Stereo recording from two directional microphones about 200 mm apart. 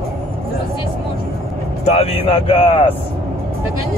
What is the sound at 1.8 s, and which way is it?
Speech, 30° left (ahead or behind).